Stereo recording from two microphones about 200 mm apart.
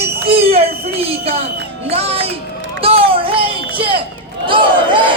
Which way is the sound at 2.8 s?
30° right (ahead or behind).